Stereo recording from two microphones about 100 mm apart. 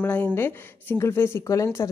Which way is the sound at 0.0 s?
15° left (ahead or behind).